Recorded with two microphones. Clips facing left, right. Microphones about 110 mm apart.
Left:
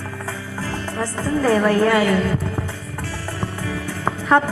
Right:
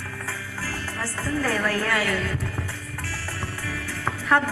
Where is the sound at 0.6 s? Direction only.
20° left (ahead or behind).